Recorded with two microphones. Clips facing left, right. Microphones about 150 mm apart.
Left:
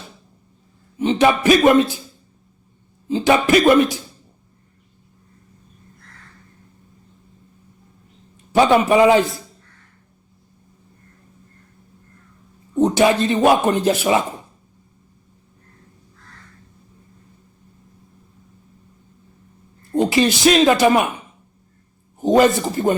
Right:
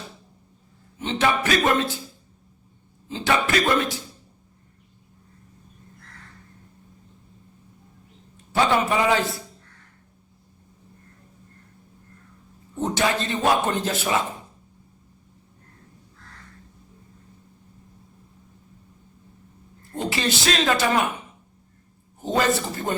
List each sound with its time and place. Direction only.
0.9 s speech: 15° left (ahead or behind)
3.1 s speech: 15° left (ahead or behind)
8.5 s speech: 20° left (ahead or behind)
12.8 s speech: 15° left (ahead or behind)
20.1 s speech: 15° left (ahead or behind)
22.2 s speech: 15° left (ahead or behind)